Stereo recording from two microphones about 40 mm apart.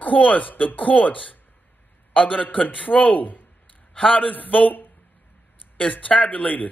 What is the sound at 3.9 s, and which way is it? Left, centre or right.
A man's voice, left.